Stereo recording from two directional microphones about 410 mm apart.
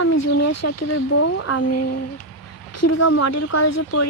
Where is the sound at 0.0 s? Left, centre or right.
Left.